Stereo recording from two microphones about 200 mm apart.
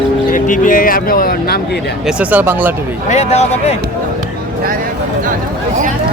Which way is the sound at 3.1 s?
35° left (ahead or behind).